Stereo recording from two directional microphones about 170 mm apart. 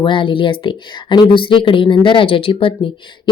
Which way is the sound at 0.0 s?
30° left (ahead or behind).